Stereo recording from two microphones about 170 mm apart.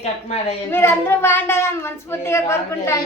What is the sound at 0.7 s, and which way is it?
A woman's voice, 15° left (ahead or behind).